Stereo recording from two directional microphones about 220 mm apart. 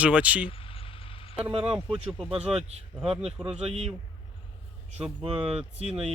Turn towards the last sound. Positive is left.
turn(degrees=-30)  # may be behind; listen again after turning